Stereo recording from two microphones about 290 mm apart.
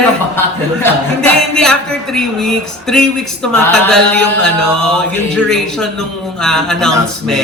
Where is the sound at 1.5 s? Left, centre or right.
Centre.